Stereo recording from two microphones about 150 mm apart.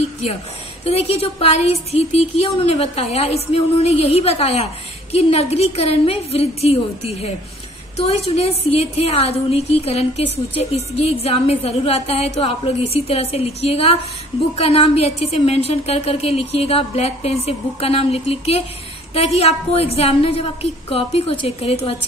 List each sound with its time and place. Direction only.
0.8 s a woman's voice: 45° left (ahead or behind)
8.4 s a woman's voice: 40° left (ahead or behind)